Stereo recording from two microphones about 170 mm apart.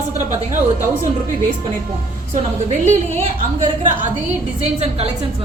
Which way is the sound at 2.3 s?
45° right (ahead or behind).